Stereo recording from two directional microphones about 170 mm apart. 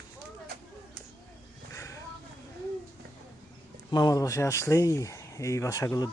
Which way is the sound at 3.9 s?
20° left (ahead or behind).